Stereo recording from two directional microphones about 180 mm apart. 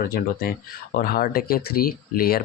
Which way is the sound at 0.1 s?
55° left (ahead or behind).